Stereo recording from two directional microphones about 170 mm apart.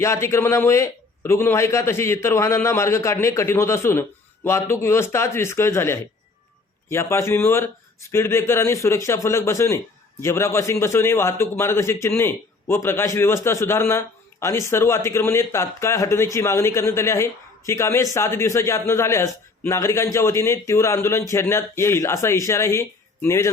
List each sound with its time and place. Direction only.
0.0 s speech: 15° left (ahead or behind)